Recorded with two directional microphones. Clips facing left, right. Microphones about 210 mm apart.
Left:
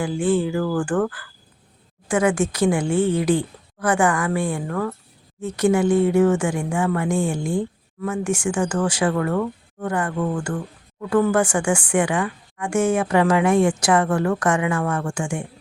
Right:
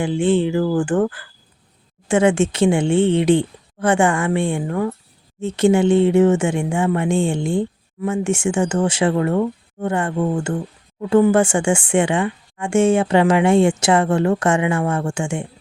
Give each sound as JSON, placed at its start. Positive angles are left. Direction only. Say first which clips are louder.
{"t": 0.0, "sound": "speech", "louder": "right 3 dB", "side_deg": -25}